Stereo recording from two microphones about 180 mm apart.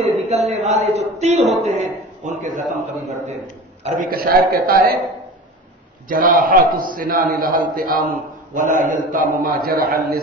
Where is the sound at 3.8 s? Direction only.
50° right (ahead or behind).